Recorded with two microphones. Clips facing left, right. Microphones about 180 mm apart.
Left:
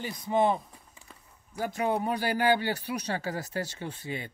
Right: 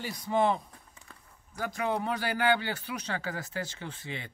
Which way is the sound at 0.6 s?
Centre (ahead or behind).